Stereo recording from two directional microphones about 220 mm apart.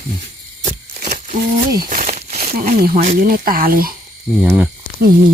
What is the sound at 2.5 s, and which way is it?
Speech, 40° right (ahead or behind).